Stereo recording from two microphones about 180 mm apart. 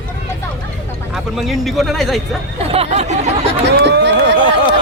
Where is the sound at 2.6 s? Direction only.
35° right (ahead or behind).